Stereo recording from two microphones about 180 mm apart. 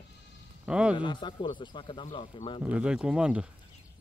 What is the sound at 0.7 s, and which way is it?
Speech, 5° right (ahead or behind).